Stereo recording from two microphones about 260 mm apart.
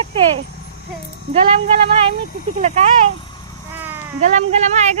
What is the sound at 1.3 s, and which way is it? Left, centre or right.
Speech, right.